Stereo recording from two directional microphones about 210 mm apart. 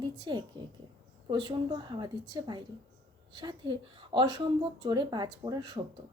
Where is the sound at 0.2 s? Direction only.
20° right (ahead or behind).